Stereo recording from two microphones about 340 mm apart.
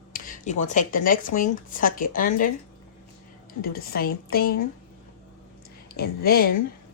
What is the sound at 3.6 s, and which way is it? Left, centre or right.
Speech, left.